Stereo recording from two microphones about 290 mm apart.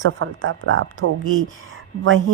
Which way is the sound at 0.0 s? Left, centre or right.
Right.